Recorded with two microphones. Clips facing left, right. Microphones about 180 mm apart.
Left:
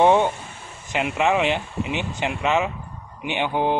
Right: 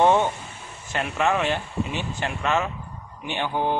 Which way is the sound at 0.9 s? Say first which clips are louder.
Left 3 dB; 15° left (ahead or behind).